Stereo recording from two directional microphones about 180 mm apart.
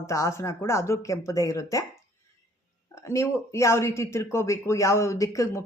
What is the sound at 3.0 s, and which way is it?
Speech, 15° left (ahead or behind).